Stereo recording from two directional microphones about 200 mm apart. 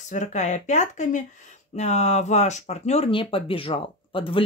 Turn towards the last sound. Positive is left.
turn(degrees=25)  # may be behind; listen again after turning